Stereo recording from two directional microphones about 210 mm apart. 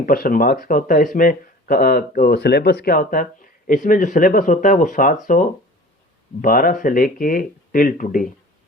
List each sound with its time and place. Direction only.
0.0 s speech: 45° left (ahead or behind)